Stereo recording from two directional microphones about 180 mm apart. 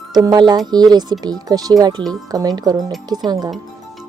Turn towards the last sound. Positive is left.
turn(degrees=-20)  # may be behind; listen again after turning